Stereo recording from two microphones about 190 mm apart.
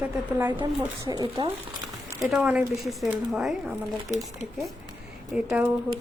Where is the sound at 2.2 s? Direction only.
Centre (ahead or behind).